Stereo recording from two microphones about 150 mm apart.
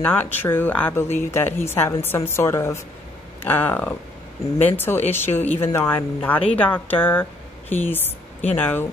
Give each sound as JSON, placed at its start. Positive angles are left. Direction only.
{"t": 0.0, "sound": "speech", "side_deg": 10}